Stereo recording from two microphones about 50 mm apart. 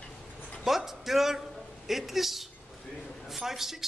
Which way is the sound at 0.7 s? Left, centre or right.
Centre.